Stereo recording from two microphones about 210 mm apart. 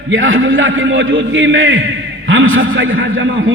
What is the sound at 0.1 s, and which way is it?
A man's voice, 70° right (ahead or behind).